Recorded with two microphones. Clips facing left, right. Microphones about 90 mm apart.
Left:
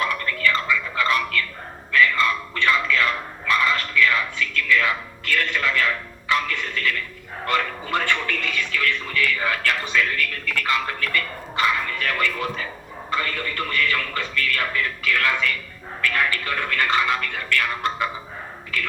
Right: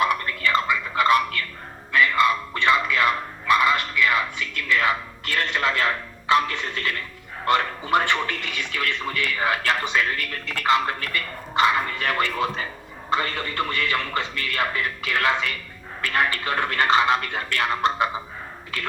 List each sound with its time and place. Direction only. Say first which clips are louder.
0.0 s a sound: right 1 dB; 20° right (ahead or behind)
7.4 s music: right 2 dB; 20° right (ahead or behind)
13.1 s a man's voice: right 1 dB; 25° right (ahead or behind)